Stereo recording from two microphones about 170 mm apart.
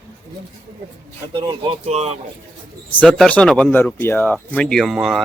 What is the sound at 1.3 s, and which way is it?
Speech, 30° right (ahead or behind).